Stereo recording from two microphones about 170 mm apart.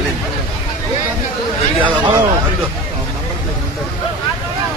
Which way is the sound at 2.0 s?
25° right (ahead or behind).